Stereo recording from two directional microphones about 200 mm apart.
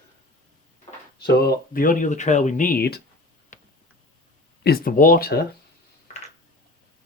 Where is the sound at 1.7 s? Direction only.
40° left (ahead or behind).